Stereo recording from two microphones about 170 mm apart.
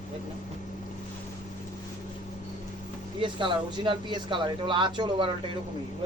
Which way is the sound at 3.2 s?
30° right (ahead or behind).